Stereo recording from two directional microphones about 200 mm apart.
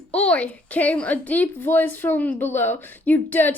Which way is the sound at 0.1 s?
5° left (ahead or behind).